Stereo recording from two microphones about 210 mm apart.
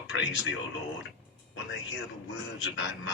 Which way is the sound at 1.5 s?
60° left (ahead or behind).